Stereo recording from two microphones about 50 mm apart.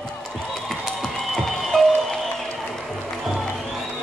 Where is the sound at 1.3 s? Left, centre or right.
Centre.